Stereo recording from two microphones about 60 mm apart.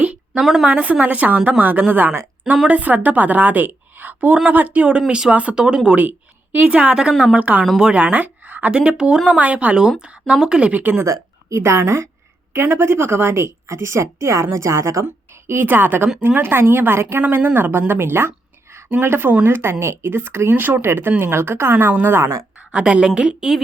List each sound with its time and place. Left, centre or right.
0.0 s a sound: right
0.4 s speech: centre
0.7 s a woman's voice: right
6.1 s a woman's voice: right
7.6 s a woman's voice: centre; by 8.7 s right
8.7 s speech: centre
11.0 s a woman's voice: right
15.0 s a woman's voice: right
22.7 s speech: centre